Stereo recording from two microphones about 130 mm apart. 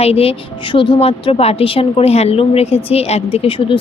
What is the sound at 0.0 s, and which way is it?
A woman's voice, 50° left (ahead or behind).